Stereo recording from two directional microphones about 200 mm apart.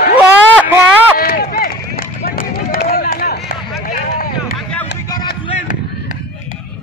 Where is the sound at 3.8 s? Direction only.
45° left (ahead or behind).